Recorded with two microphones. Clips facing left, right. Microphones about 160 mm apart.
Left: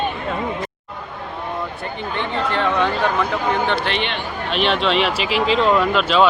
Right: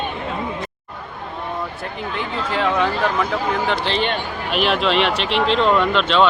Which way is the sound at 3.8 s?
40° right (ahead or behind).